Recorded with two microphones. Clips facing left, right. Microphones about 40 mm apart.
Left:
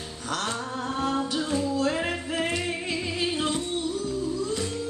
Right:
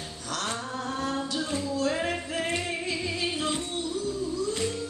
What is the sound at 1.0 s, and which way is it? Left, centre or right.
Music, centre.